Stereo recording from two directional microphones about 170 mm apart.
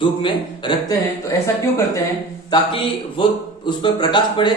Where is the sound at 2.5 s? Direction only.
30° left (ahead or behind).